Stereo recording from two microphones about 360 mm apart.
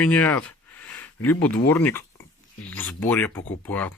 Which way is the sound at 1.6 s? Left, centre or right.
Centre.